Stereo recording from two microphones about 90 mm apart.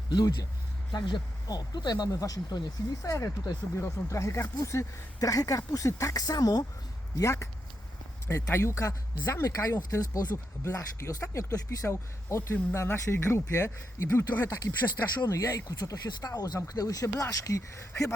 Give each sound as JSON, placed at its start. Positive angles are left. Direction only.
{"t": 0.1, "sound": "speech", "side_deg": 55}
{"t": 7.2, "sound": "speech", "side_deg": 35}
{"t": 10.3, "sound": "speech", "side_deg": 35}